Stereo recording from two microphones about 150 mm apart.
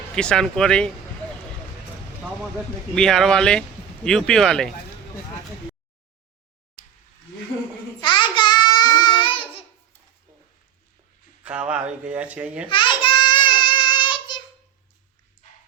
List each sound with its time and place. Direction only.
0.2 s speech: 5° left (ahead or behind)
2.9 s speech: 5° left (ahead or behind)
8.0 s babbling: 30° left (ahead or behind)
11.4 s speech: 5° right (ahead or behind)
12.6 s child singing: 30° left (ahead or behind)